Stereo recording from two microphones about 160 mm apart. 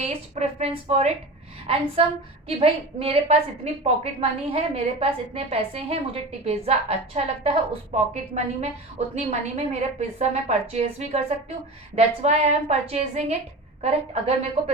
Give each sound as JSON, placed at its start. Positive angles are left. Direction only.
{"t": 0.0, "sound": "a woman's voice", "side_deg": -40}
{"t": 2.5, "sound": "a woman's voice", "side_deg": -35}